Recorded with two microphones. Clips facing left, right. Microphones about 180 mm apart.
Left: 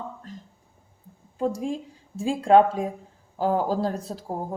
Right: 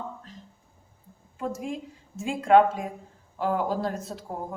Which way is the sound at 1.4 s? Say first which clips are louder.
Left 5 dB; 30° left (ahead or behind).